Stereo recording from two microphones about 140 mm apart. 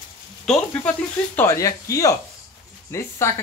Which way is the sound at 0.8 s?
15° left (ahead or behind).